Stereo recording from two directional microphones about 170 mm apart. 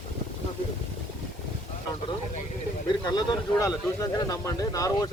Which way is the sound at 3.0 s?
25° left (ahead or behind).